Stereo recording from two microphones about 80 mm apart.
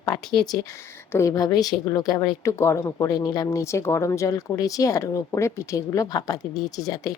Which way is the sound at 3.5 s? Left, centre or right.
Left.